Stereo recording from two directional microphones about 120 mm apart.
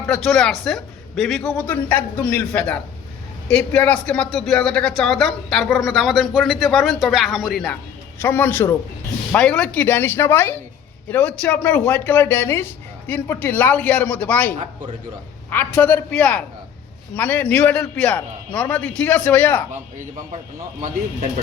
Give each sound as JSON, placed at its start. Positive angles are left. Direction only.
{"t": 0.1, "sound": "a woman's voice", "side_deg": 5}
{"t": 1.5, "sound": "a man's voice", "side_deg": 15}
{"t": 3.8, "sound": "a woman's voice", "side_deg": 10}
{"t": 8.2, "sound": "a man's voice", "side_deg": 15}